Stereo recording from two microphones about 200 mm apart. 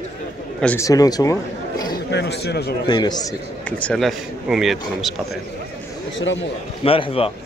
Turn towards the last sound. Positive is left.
turn(degrees=30)  # may be behind; listen again after turning